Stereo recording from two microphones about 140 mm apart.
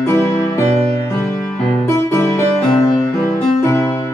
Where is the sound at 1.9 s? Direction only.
20° left (ahead or behind).